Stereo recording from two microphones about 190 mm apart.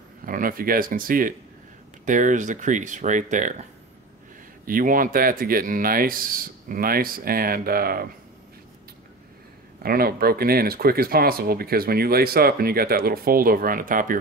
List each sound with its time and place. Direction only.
0.2 s speech: 45° right (ahead or behind)
4.6 s speech: 45° right (ahead or behind)
9.8 s speech: 50° right (ahead or behind)